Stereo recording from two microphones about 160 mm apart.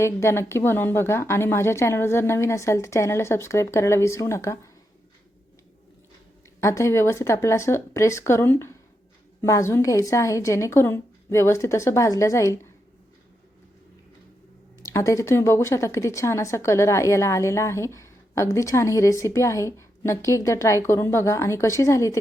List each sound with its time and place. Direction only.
0.0 s speech: 15° left (ahead or behind)
6.6 s a woman's voice: 20° left (ahead or behind)
14.8 s speech: 20° left (ahead or behind)